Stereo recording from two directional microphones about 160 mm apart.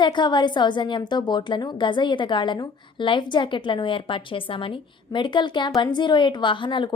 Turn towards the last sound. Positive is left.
turn(degrees=30)  # may be behind; listen again after turning